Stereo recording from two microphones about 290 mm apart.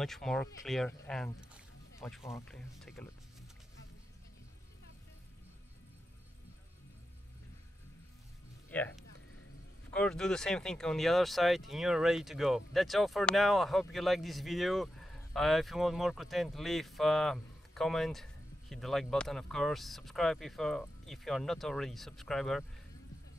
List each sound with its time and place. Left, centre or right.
0.0 s speech: centre
8.6 s speech: centre